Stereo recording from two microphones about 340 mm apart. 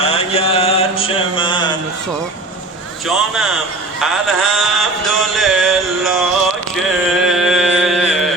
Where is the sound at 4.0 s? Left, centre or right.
Centre.